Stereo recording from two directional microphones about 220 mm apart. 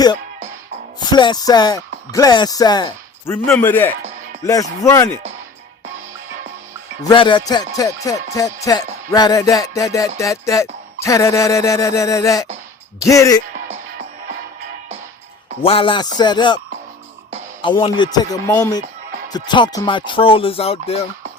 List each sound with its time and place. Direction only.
0.9 s music: 20° left (ahead or behind)
7.0 s music: 20° left (ahead or behind)
15.6 s music: 25° left (ahead or behind)
17.6 s music: 20° left (ahead or behind)